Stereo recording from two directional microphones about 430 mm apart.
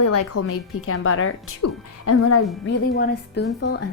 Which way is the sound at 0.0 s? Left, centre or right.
Left.